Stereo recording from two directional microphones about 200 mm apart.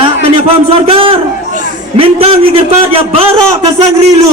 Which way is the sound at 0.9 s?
25° right (ahead or behind).